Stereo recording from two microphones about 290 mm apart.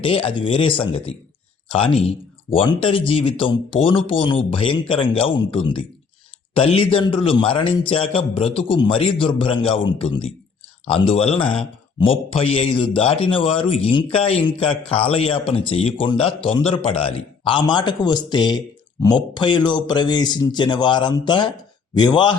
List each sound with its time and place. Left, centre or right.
0.0 s speech: centre